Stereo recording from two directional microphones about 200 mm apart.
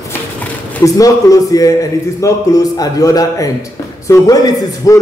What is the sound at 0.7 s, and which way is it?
A man's voice, 15° left (ahead or behind).